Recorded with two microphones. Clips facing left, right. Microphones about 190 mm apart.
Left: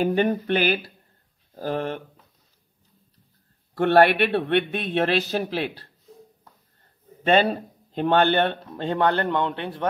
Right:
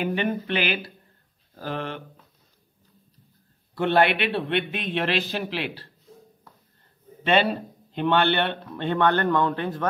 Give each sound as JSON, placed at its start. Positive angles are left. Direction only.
{"t": 0.0, "sound": "a man's voice", "side_deg": 40}
{"t": 3.7, "sound": "a man's voice", "side_deg": 55}
{"t": 7.2, "sound": "speech", "side_deg": 40}